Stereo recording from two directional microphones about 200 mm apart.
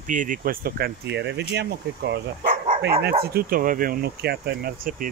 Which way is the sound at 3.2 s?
50° right (ahead or behind).